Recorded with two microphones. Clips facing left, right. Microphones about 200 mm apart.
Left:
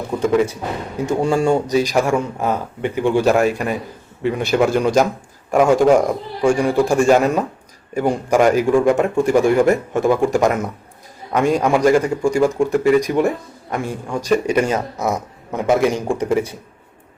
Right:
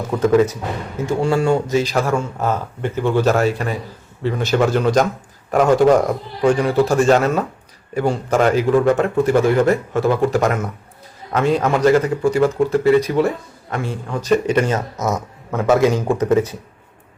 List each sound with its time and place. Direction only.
0.9 s a man's voice: 20° left (ahead or behind)